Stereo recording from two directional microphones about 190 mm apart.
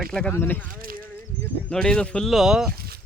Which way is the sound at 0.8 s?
50° right (ahead or behind).